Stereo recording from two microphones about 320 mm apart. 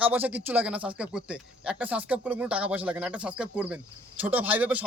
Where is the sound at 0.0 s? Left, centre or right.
Centre.